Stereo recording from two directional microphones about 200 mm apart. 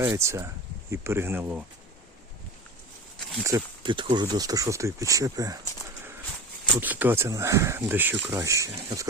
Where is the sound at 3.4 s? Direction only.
20° right (ahead or behind).